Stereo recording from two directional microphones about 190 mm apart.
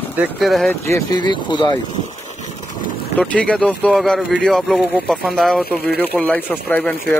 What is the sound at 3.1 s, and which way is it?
Speech, 5° left (ahead or behind).